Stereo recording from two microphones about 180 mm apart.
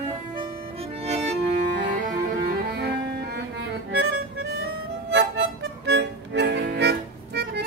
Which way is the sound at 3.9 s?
65° right (ahead or behind).